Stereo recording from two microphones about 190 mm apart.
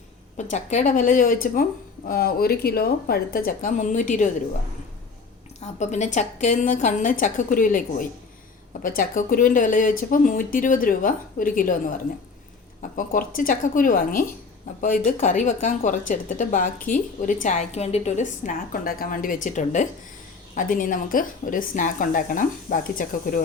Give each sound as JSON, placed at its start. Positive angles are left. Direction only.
{"t": 0.3, "sound": "a woman's voice", "side_deg": 40}
{"t": 5.5, "sound": "a woman's voice", "side_deg": 40}
{"t": 12.8, "sound": "a woman's voice", "side_deg": 45}